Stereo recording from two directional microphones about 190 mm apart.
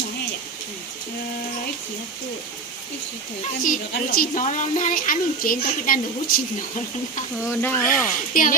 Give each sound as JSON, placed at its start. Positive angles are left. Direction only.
{"t": 3.6, "sound": "speech", "side_deg": 50}
{"t": 7.4, "sound": "speech", "side_deg": 10}
{"t": 8.3, "sound": "speech", "side_deg": 45}